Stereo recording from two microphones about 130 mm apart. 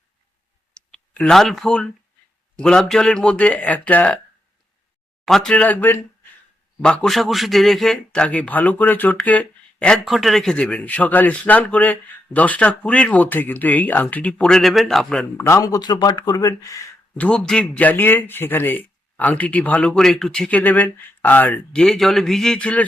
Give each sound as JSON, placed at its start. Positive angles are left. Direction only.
{"t": 0.7, "sound": "a sound", "side_deg": 5}
{"t": 2.6, "sound": "a man's voice", "side_deg": 5}
{"t": 5.2, "sound": "a man's voice", "side_deg": 5}
{"t": 15.4, "sound": "speech", "side_deg": 25}
{"t": 17.2, "sound": "a man's voice", "side_deg": 10}